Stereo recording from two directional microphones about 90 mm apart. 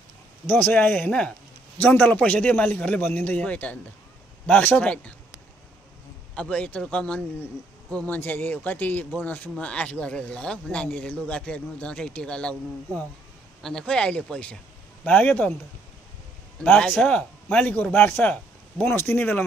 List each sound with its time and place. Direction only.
0.5 s a man's voice: 20° left (ahead or behind)
6.3 s a man's voice: 15° left (ahead or behind)
16.6 s a man's voice: 15° left (ahead or behind)